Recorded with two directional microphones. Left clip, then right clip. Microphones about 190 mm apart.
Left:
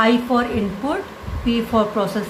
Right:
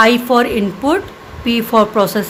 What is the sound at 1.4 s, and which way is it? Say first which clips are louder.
Speech: right 6 dB; 65° right (ahead or behind).